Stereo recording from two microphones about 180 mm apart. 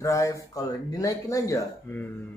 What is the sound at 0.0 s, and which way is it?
Speech, 15° left (ahead or behind).